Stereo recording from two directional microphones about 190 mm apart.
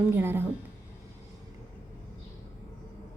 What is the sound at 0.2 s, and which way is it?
Speech, 10° right (ahead or behind).